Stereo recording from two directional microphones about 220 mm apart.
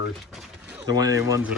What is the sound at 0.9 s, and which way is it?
Speech, 15° right (ahead or behind).